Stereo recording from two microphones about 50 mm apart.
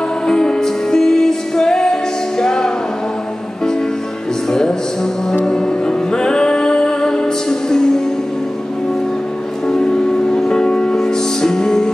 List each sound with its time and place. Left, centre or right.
0.3 s music: centre
4.5 s music: centre
9.7 s music: centre